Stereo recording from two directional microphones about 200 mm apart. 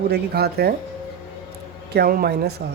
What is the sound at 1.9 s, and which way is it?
Speech, 50° right (ahead or behind).